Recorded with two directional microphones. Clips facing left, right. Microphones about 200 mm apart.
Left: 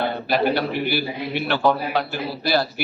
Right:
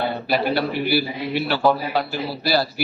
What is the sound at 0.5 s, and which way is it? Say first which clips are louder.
Speech: right 2 dB; 10° right (ahead or behind).